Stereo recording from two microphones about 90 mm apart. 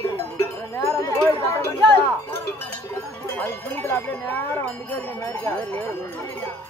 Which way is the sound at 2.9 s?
20° left (ahead or behind).